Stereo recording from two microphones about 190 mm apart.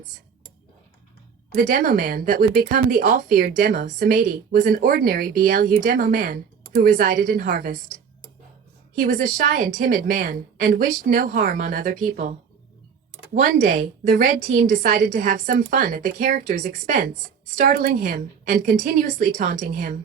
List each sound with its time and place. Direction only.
1.5 s speech: 45° right (ahead or behind)
9.0 s speech: 45° right (ahead or behind)
17.6 s speech: 50° right (ahead or behind)